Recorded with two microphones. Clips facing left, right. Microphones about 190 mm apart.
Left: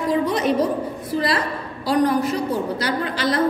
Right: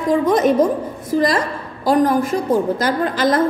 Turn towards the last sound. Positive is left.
turn(degrees=-50)  # may be behind; listen again after turning